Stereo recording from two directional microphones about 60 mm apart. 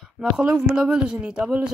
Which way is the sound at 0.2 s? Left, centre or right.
Centre.